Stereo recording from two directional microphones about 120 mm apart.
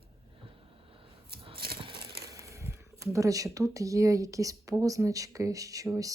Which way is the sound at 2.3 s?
25° right (ahead or behind).